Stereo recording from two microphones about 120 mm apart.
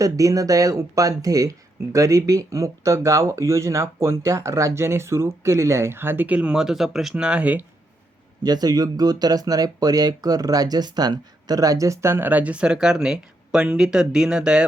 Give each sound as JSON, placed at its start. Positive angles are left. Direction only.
{"t": 0.0, "sound": "speech", "side_deg": -30}
{"t": 8.4, "sound": "speech", "side_deg": -35}